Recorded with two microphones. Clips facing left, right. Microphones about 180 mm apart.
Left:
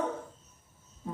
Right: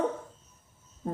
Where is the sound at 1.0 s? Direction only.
50° right (ahead or behind).